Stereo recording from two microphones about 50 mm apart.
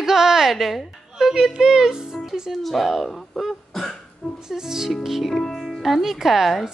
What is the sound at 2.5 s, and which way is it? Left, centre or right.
A woman's voice, centre.